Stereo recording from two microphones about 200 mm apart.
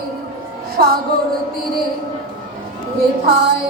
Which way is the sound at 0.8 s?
50° right (ahead or behind).